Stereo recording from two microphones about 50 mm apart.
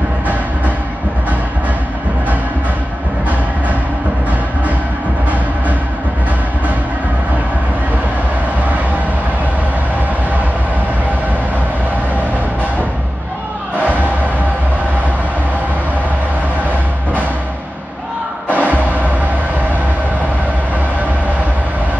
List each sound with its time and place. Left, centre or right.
18.5 s music: right